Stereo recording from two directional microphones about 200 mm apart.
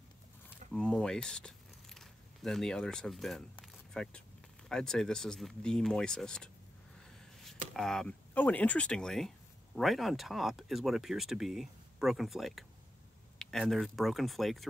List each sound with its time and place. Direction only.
0.7 s speech: 5° left (ahead or behind)
7.7 s speech: centre (ahead or behind)